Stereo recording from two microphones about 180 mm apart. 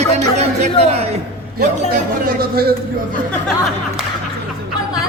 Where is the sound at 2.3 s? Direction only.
55° right (ahead or behind).